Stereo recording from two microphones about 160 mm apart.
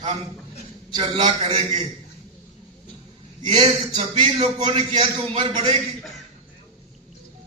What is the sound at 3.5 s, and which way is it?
A man's voice, 30° right (ahead or behind).